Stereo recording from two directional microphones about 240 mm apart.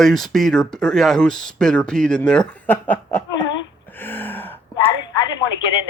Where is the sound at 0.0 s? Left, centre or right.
Centre.